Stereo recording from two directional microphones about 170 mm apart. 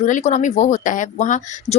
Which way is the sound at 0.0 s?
45° left (ahead or behind).